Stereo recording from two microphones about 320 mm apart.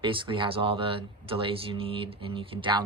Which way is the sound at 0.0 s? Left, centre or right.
Centre.